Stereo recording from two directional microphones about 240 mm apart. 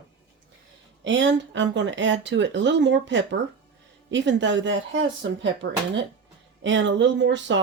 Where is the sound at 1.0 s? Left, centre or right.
Right.